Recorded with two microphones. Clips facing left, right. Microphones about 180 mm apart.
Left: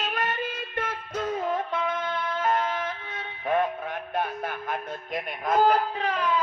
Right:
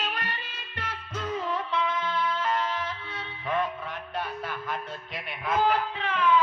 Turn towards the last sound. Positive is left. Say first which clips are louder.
# right 1 dB
turn(degrees=40)  # may be behind; listen again after turning